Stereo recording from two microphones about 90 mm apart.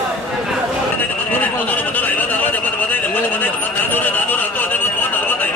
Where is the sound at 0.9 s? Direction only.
20° left (ahead or behind).